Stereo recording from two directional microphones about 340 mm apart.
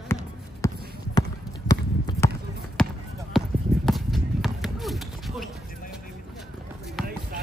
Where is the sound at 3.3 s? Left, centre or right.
Centre.